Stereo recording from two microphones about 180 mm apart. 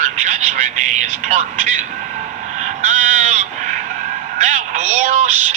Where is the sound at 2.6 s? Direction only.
40° right (ahead or behind).